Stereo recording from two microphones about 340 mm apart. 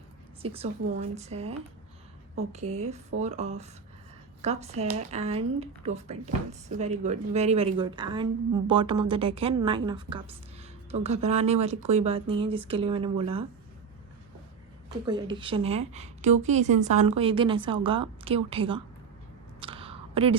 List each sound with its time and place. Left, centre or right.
0.4 s speech: centre
14.8 s speech: centre
19.6 s a sound: centre